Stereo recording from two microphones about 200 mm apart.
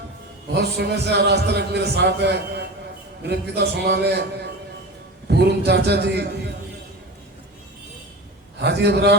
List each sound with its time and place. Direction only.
0.5 s a man's voice: 55° right (ahead or behind)
5.3 s a man's voice: 55° right (ahead or behind)
8.5 s a man's voice: 55° right (ahead or behind)